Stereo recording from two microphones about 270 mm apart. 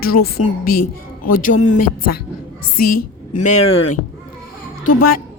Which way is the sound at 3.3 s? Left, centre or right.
Left.